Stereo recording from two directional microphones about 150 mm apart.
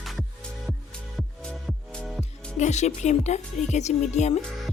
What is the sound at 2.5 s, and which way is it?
Speech, 50° left (ahead or behind).